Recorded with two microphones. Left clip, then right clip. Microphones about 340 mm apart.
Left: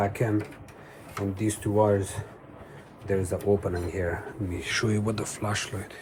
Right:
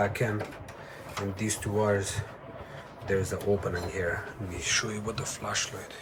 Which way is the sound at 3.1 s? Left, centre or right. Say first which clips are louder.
Left 3 dB; centre.